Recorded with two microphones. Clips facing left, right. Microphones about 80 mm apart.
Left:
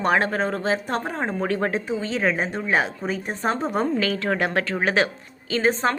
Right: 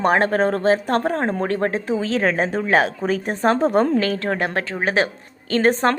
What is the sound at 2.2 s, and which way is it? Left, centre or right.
Speech, right.